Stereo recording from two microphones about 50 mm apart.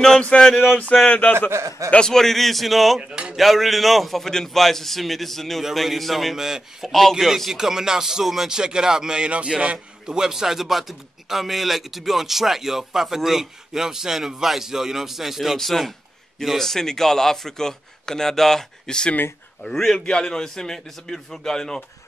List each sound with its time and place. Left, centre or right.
0.7 s speech: left
2.0 s a man's voice: centre
3.0 s speech: centre
3.3 s a man's voice: centre
6.9 s a man's voice: centre